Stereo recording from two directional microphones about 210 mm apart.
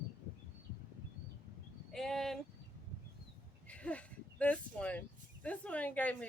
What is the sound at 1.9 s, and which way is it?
Speech, centre (ahead or behind).